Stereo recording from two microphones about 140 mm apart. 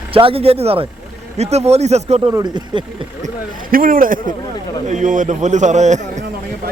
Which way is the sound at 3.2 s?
85° right.